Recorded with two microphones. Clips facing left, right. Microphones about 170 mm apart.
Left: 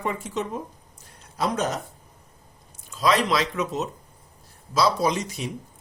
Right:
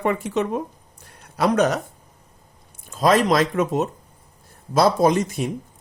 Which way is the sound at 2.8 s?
50° right (ahead or behind).